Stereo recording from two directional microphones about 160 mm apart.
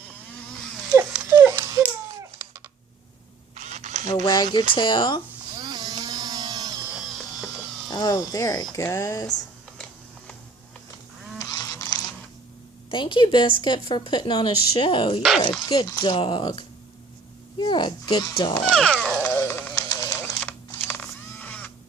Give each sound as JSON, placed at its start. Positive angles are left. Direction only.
{"t": 1.1, "sound": "dog", "side_deg": -15}
{"t": 3.5, "sound": "camera", "side_deg": -45}
{"t": 4.0, "sound": "a woman's voice", "side_deg": 25}
{"t": 5.5, "sound": "a sound", "side_deg": -25}
{"t": 6.9, "sound": "music", "side_deg": -5}
{"t": 7.9, "sound": "a woman's voice", "side_deg": 25}
{"t": 11.3, "sound": "goose", "side_deg": 25}
{"t": 12.9, "sound": "a woman's voice", "side_deg": 30}
{"t": 18.7, "sound": "cat", "side_deg": 5}
{"t": 19.2, "sound": "a sound", "side_deg": 15}
{"t": 19.9, "sound": "a sound", "side_deg": 25}
{"t": 20.3, "sound": "camera", "side_deg": 10}